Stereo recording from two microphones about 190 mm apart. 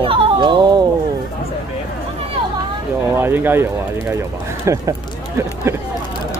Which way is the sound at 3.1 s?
10° right (ahead or behind).